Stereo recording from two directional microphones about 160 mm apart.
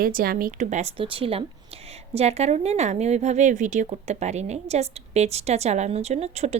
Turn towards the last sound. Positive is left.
turn(degrees=-40)  # may be behind; listen again after turning